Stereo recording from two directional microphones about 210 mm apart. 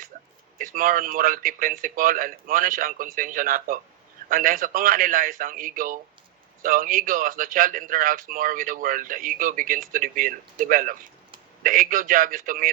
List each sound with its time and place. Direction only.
0.6 s speech: 40° right (ahead or behind)